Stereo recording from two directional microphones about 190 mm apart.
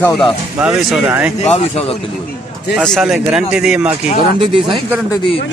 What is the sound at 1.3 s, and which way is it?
Speech, 35° left (ahead or behind).